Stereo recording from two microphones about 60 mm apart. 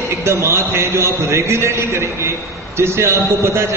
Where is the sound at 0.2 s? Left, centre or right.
Right.